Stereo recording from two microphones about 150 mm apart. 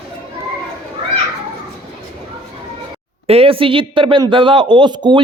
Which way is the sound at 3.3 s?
40° right (ahead or behind).